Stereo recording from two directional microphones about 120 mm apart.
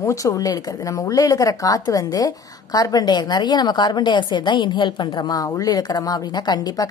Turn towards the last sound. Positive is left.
turn(degrees=35)  # may be behind; listen again after turning